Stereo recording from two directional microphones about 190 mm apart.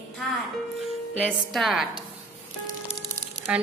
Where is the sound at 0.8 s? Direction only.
5° right (ahead or behind).